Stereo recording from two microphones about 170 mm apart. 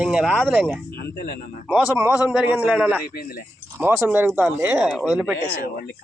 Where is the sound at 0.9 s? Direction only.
70° left (ahead or behind).